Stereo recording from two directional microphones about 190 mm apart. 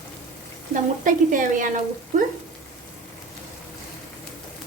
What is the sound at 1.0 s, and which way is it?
Speech, 45° right (ahead or behind).